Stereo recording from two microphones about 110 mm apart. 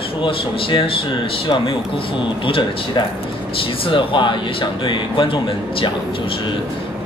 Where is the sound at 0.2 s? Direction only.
50° left (ahead or behind).